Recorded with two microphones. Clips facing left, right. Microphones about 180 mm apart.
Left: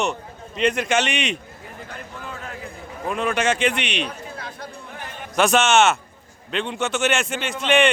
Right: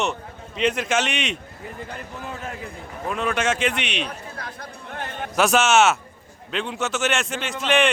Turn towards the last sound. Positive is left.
turn(degrees=0)  # may be behind; listen again after turning